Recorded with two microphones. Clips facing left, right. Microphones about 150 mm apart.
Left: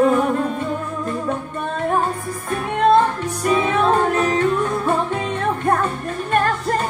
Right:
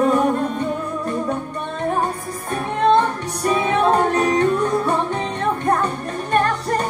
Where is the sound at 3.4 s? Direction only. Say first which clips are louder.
Even; 40° right (ahead or behind).